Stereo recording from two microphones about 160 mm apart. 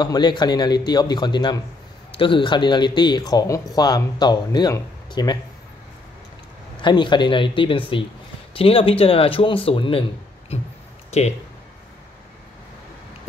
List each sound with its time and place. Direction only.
0.0 s speech: 25° left (ahead or behind)
6.8 s speech: 30° left (ahead or behind)
11.1 s speech: 45° left (ahead or behind)